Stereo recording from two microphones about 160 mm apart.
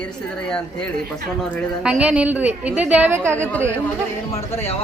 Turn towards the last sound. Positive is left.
turn(degrees=40)  # may be behind; listen again after turning